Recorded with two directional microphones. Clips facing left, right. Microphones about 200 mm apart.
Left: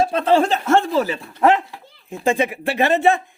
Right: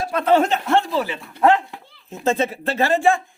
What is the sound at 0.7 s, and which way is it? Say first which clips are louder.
Speech: left 3 dB; 45° left (ahead or behind).